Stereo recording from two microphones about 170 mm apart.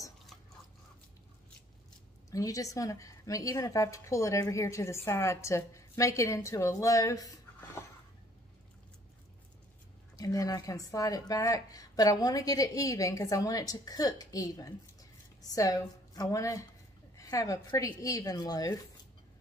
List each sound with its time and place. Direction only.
2.3 s a woman's voice: 20° left (ahead or behind)
10.1 s a woman's voice: 20° left (ahead or behind)